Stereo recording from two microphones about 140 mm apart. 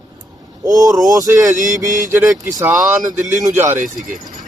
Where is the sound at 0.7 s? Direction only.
25° right (ahead or behind).